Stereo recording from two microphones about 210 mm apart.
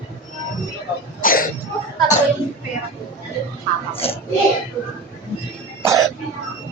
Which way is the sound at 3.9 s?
25° left (ahead or behind).